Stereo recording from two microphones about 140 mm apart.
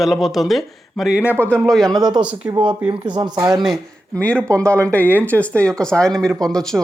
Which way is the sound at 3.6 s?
5° left (ahead or behind).